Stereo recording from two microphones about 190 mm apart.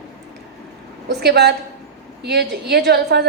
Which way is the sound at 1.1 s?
60° right (ahead or behind).